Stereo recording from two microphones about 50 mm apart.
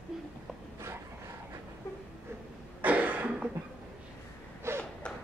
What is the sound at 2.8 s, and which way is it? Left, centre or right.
Cough, right.